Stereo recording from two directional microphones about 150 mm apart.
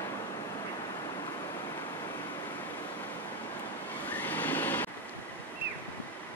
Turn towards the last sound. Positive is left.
turn(degrees=10)  # may be behind; listen again after turning